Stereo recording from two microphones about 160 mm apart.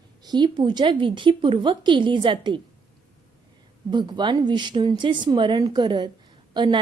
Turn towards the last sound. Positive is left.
turn(degrees=-30)  # may be behind; listen again after turning